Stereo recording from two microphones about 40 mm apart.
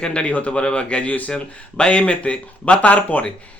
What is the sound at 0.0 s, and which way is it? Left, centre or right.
Speech, left.